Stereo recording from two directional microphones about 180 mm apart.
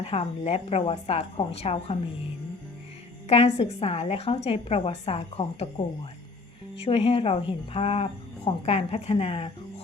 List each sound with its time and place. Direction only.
0.1 s speech: 35° left (ahead or behind)
3.2 s speech: 35° left (ahead or behind)
6.8 s speech: 35° left (ahead or behind)